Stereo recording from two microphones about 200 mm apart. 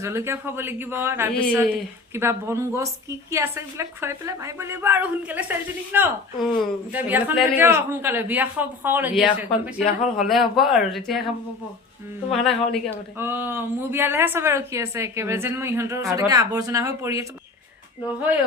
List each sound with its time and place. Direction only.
0.0 s a man's voice: 15° right (ahead or behind)
12.3 s speech: centre (ahead or behind)
12.9 s a man's voice: 10° right (ahead or behind)